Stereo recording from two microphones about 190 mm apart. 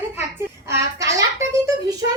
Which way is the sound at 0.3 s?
15° right (ahead or behind).